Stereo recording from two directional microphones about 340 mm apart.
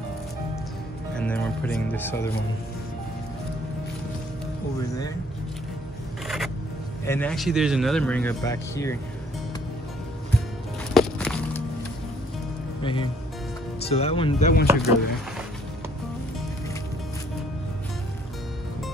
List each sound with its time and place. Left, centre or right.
1.1 s speech: centre
6.2 s zipper: centre
7.1 s speech: centre
10.9 s walk: centre
12.8 s speech: centre
14.7 s speech: centre